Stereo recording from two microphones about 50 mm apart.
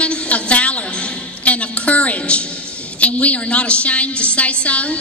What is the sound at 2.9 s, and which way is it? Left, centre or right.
A woman's voice, left.